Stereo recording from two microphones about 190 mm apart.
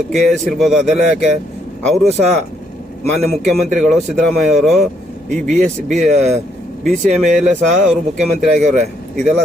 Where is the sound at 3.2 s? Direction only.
35° right (ahead or behind).